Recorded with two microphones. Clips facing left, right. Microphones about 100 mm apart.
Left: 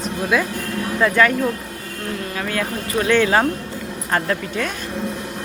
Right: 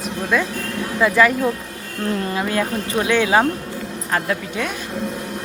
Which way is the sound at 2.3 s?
20° right (ahead or behind).